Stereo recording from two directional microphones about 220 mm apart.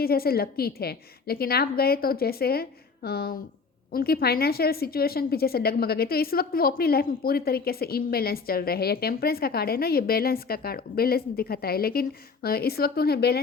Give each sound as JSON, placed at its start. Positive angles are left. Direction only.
{"t": 0.0, "sound": "a woman's voice", "side_deg": 45}